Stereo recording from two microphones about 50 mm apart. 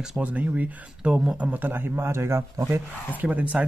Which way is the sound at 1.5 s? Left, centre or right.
Right.